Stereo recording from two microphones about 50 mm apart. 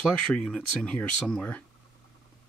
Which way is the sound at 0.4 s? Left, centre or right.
Centre.